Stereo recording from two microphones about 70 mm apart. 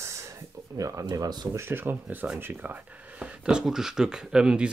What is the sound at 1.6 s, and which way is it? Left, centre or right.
Speech, right.